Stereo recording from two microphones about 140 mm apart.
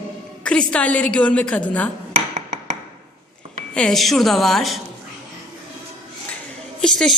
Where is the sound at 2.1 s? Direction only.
55° right (ahead or behind).